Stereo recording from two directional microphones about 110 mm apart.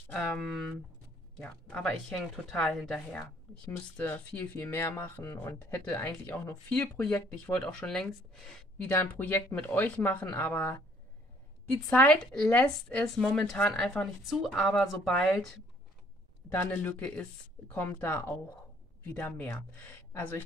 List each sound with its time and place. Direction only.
0.1 s speech: 5° left (ahead or behind)
8.8 s speech: 15° left (ahead or behind)
11.9 s speech: 15° left (ahead or behind)
16.4 s speech: 15° left (ahead or behind)